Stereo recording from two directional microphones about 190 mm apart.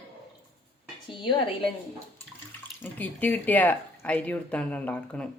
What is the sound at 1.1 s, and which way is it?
Speech, 25° left (ahead or behind).